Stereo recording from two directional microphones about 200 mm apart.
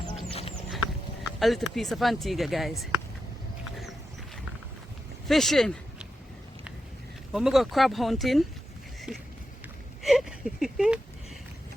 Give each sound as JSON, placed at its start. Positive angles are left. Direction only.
{"t": 1.4, "sound": "speech", "side_deg": 0}
{"t": 5.3, "sound": "speech", "side_deg": 0}
{"t": 7.3, "sound": "speech", "side_deg": 0}
{"t": 10.0, "sound": "a sound", "side_deg": 0}